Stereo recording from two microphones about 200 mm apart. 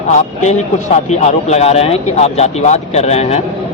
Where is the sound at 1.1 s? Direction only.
35° left (ahead or behind).